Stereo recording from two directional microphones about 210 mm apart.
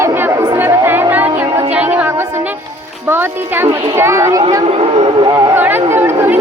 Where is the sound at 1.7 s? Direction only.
5° right (ahead or behind).